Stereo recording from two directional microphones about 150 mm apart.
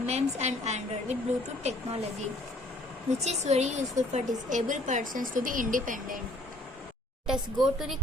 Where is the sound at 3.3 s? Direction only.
50° right (ahead or behind).